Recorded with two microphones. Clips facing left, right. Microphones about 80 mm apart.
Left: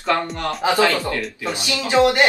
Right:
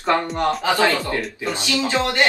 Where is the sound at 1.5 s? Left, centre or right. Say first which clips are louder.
Left 5 dB; centre.